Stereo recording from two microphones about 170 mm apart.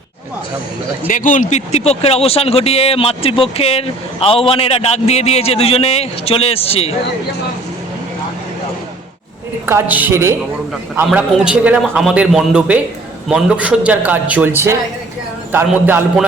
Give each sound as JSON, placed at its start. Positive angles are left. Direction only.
{"t": 1.0, "sound": "speech", "side_deg": 50}
{"t": 9.6, "sound": "a man's voice", "side_deg": -10}